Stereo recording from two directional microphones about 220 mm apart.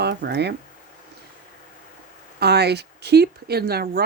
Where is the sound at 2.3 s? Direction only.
50° right (ahead or behind).